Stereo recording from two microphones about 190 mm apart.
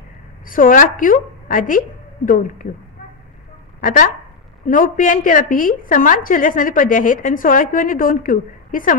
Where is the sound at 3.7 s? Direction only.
45° left (ahead or behind).